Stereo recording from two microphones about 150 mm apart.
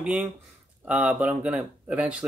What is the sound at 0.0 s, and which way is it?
Speech, 10° right (ahead or behind).